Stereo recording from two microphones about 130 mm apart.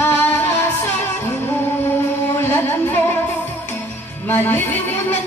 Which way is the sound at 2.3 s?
15° left (ahead or behind).